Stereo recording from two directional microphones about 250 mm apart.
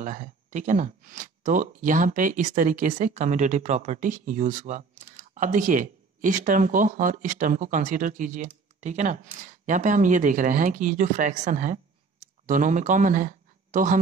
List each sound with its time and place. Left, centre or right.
0.0 s speech: right